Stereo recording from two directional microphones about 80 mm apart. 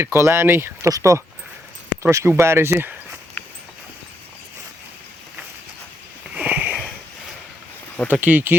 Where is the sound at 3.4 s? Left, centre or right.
Left.